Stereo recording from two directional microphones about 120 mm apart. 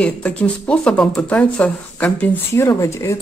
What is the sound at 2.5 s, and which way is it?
Speech, 25° left (ahead or behind).